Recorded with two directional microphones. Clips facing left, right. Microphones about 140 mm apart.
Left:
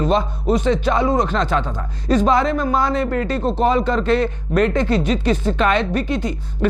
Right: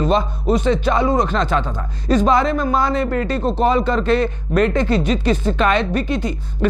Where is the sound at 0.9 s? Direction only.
20° right (ahead or behind).